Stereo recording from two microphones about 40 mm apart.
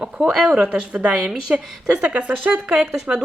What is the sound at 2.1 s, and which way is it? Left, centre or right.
Speech, right.